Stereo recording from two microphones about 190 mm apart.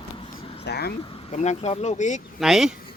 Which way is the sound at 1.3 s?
35° left (ahead or behind).